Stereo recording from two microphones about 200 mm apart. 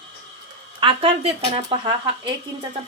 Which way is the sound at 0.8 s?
25° right (ahead or behind).